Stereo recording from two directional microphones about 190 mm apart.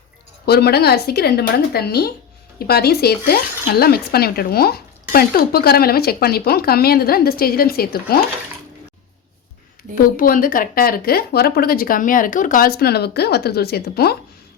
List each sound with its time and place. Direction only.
0.4 s speech: 60° left (ahead or behind)
10.2 s speech: 45° left (ahead or behind)